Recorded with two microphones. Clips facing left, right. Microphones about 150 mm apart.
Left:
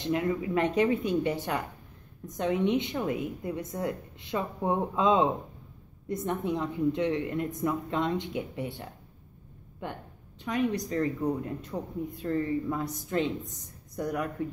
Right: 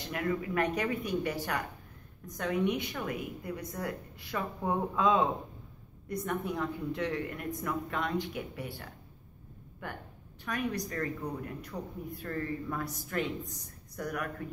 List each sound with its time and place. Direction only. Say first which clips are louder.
0.0 s a woman's voice: left 5 dB; 20° left (ahead or behind)